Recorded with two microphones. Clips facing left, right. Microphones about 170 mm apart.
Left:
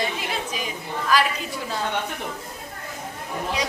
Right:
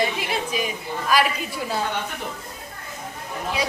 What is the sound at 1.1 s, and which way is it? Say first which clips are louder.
Speech: right 1 dB; 10° right (ahead or behind).